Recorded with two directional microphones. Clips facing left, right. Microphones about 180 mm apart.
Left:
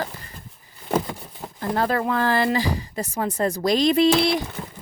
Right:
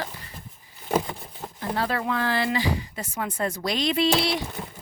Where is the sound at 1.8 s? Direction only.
45° left (ahead or behind).